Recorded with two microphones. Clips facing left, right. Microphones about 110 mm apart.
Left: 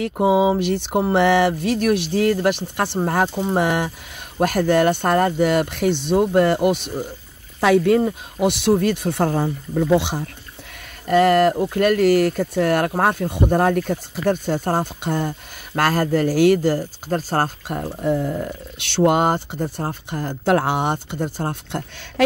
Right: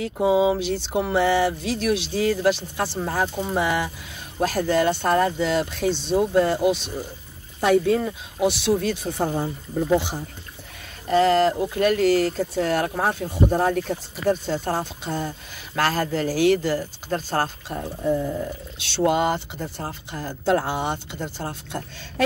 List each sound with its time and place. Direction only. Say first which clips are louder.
0.0 s speech: left 2 dB; 55° left (ahead or behind)
7.6 s speech: left 3 dB; 75° left (ahead or behind)
8.0 s speech: left 3 dB; 55° left (ahead or behind); by 10.2 s 85° left
11.1 s speech: left 3 dB; 60° left (ahead or behind); by 17.5 s 40° left (ahead or behind)
17.6 s speech: left 2 dB; 60° left (ahead or behind)